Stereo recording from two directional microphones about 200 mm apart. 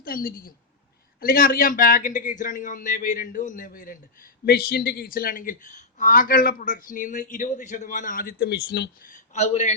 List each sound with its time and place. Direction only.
0.0 s a man's voice: 45° left (ahead or behind)